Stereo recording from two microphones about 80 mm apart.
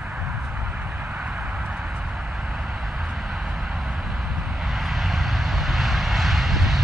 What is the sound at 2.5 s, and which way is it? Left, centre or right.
Vehicle, centre.